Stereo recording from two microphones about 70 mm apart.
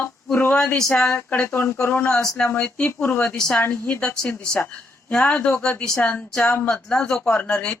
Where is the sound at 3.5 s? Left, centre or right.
Left.